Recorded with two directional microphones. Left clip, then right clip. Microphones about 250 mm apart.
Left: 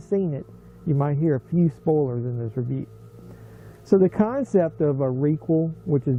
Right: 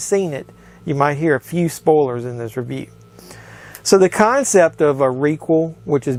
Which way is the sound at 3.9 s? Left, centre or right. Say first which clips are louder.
Right 8 dB; centre.